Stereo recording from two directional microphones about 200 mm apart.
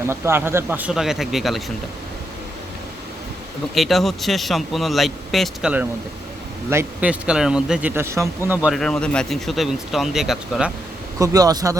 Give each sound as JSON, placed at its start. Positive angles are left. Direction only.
{"t": 0.0, "sound": "speech", "side_deg": -10}
{"t": 3.8, "sound": "a man's voice", "side_deg": 0}
{"t": 8.4, "sound": "speech", "side_deg": -5}
{"t": 11.2, "sound": "a man's voice", "side_deg": -15}